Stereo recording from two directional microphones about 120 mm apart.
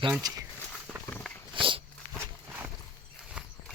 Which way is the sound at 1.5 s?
45° right (ahead or behind).